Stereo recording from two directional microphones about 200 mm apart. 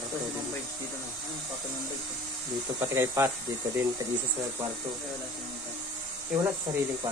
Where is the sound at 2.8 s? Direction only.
10° right (ahead or behind).